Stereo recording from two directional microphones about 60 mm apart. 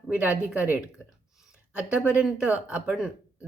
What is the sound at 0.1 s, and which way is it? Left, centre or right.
Speech, right.